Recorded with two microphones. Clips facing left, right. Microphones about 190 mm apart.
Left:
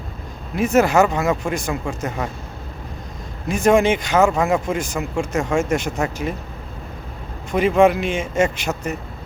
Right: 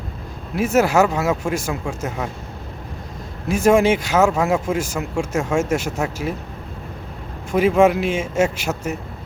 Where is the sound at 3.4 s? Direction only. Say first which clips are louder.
Right 1 dB; 5° right (ahead or behind).